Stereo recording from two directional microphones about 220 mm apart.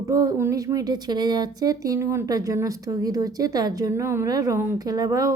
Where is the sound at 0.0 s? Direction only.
15° right (ahead or behind).